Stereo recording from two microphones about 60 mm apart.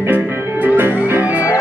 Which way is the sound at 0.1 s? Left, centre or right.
Right.